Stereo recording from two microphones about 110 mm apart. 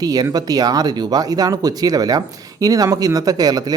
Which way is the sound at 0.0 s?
35° right (ahead or behind).